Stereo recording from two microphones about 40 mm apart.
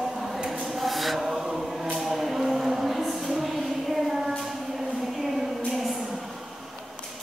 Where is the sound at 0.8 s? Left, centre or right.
Centre.